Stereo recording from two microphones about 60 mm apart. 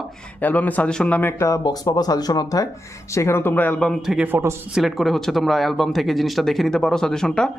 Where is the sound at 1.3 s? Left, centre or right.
Left.